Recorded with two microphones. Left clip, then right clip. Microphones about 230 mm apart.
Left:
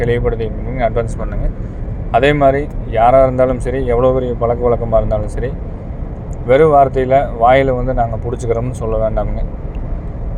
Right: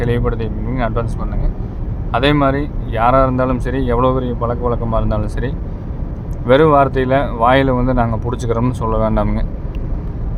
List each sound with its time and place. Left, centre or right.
0.0 s speech: centre
2.1 s speech: centre
6.5 s speech: centre